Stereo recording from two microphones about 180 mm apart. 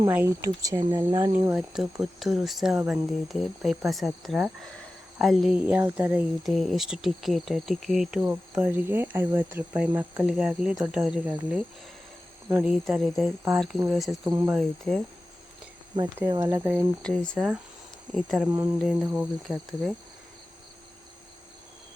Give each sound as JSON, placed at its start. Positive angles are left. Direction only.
{"t": 0.0, "sound": "speech", "side_deg": -15}
{"t": 0.9, "sound": "speech", "side_deg": -30}
{"t": 1.5, "sound": "speech", "side_deg": 0}
{"t": 12.6, "sound": "speech", "side_deg": 0}
{"t": 14.3, "sound": "speech", "side_deg": -15}
{"t": 14.5, "sound": "speech", "side_deg": 0}
{"t": 16.3, "sound": "speech", "side_deg": -15}
{"t": 17.0, "sound": "speech", "side_deg": 5}
{"t": 18.4, "sound": "speech", "side_deg": -15}
{"t": 18.8, "sound": "speech", "side_deg": 0}